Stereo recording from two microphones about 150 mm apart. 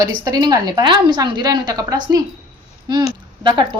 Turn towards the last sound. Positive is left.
turn(degrees=-30)  # may be behind; listen again after turning